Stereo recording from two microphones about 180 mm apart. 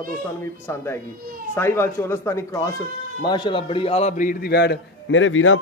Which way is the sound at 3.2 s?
25° left (ahead or behind).